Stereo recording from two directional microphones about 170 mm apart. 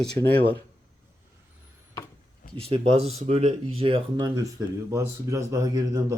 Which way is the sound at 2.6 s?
35° right (ahead or behind).